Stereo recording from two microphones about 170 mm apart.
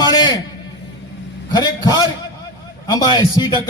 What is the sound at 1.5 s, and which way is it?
A man's voice, 25° left (ahead or behind).